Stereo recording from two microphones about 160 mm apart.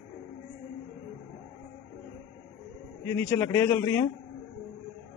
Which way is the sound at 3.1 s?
15° left (ahead or behind).